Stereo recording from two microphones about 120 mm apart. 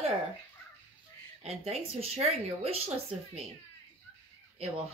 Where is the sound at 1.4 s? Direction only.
60° right (ahead or behind).